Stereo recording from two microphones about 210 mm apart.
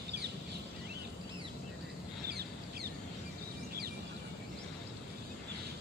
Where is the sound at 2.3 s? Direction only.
50° right (ahead or behind).